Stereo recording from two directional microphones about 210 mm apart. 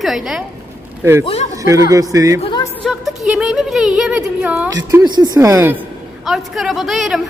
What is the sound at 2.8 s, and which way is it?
A woman's voice, centre (ahead or behind).